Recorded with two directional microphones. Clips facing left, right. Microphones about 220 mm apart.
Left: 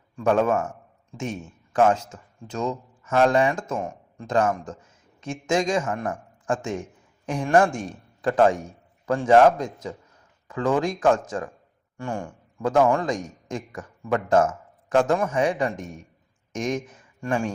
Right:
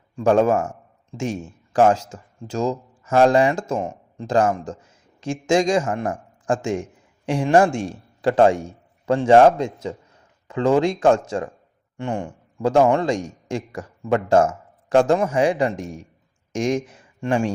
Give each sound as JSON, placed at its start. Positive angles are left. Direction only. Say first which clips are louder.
{"t": 0.2, "sound": "a man's voice", "louder": "right 4 dB", "side_deg": -30}